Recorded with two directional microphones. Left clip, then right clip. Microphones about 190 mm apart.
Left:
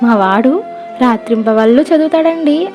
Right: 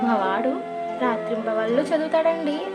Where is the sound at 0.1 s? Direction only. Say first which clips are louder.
Left 14 dB; 50° left (ahead or behind).